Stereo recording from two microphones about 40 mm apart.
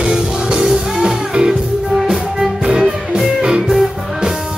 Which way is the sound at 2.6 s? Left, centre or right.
Right.